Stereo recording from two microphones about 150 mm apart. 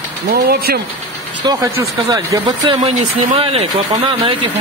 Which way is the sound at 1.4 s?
30° right (ahead or behind).